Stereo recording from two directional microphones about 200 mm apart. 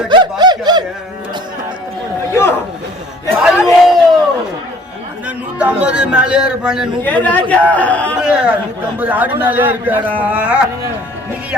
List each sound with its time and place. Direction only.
0.1 s snicker: 20° right (ahead or behind)
2.3 s a sound: 10° left (ahead or behind)
3.6 s a sound: centre (ahead or behind)
5.5 s a man's voice: 5° right (ahead or behind)
7.0 s a man's voice: 10° left (ahead or behind)
8.2 s a man's voice: 5° right (ahead or behind)